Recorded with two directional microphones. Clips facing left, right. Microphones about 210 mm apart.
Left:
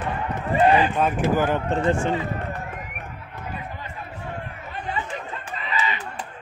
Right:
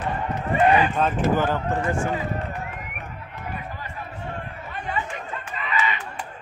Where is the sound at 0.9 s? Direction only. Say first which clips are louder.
Even; 10° left (ahead or behind).